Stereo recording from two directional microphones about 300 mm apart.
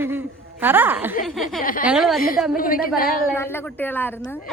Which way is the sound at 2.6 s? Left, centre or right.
Left.